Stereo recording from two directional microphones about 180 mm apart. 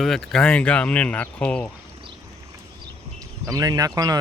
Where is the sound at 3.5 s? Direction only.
20° right (ahead or behind).